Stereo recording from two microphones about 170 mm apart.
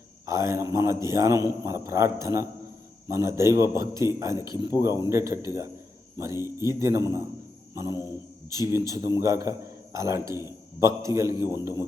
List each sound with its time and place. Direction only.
0.3 s a man's voice: 15° right (ahead or behind)
7.7 s cricket: 15° right (ahead or behind)
8.4 s a man's voice: 15° right (ahead or behind)